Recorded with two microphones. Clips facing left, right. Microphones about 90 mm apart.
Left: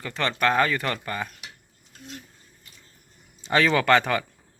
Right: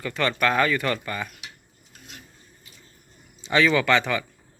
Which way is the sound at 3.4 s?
45° left (ahead or behind).